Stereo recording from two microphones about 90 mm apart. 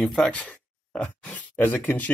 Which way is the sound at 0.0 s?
5° left (ahead or behind).